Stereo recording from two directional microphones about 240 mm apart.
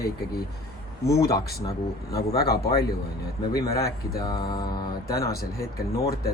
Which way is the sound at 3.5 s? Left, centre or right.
Centre.